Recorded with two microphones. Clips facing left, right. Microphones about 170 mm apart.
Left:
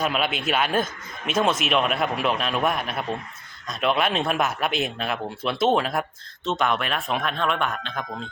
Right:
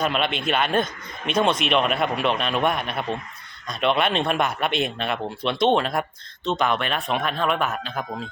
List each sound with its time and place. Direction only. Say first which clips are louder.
0.0 s speech: right 1 dB; 5° left (ahead or behind)